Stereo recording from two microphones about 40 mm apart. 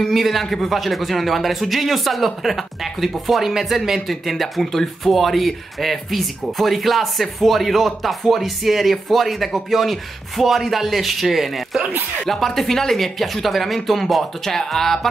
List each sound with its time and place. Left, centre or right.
0.1 s a man's voice: centre